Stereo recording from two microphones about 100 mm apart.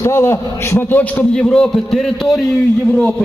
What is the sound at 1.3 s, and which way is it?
A man's voice, 5° left (ahead or behind).